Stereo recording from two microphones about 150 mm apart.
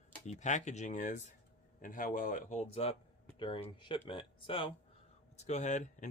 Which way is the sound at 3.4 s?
35° left (ahead or behind).